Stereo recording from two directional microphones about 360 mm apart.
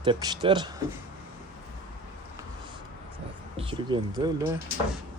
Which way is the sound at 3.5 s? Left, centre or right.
Centre.